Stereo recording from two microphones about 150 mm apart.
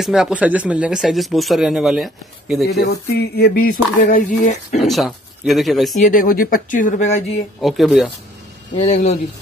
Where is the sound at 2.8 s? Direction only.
90° left.